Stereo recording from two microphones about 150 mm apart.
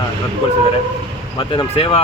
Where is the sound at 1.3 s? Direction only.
35° left (ahead or behind).